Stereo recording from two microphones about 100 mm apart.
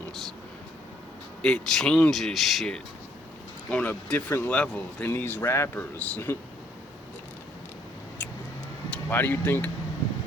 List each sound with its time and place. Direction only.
1.4 s speech: 5° left (ahead or behind)
3.7 s speech: 15° left (ahead or behind)
4.3 s speech: 25° left (ahead or behind)
4.5 s speech: 10° left (ahead or behind)
5.0 s speech: 20° left (ahead or behind)
8.9 s speech: 20° left (ahead or behind)